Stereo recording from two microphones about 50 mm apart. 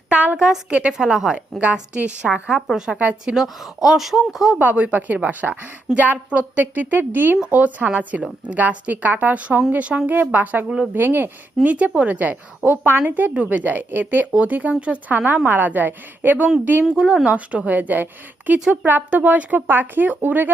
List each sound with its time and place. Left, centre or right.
0.1 s a sound: right
0.3 s a woman's voice: centre
0.7 s a woman's voice: right
0.9 s speech: centre
1.6 s a woman's voice: right
2.7 s speech: centre
4.6 s a woman's voice: right
11.6 s a woman's voice: right
16.9 s speech: centre
17.2 s a woman's voice: right